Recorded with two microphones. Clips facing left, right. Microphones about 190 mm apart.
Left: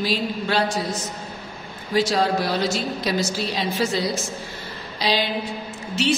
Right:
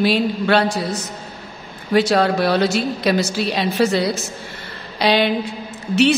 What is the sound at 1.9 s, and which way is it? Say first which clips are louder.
A man's voice: right 5 dB; 65° right (ahead or behind).